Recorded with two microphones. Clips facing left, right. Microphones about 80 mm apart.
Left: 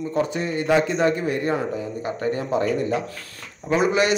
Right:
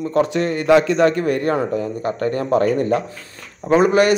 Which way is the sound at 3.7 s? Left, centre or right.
Right.